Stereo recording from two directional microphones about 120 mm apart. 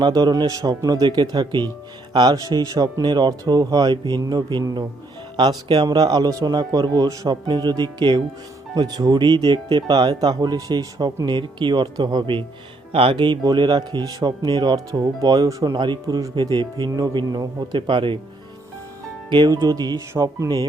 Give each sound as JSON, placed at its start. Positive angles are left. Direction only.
{"t": 0.0, "sound": "speech", "side_deg": -35}
{"t": 19.3, "sound": "speech", "side_deg": -35}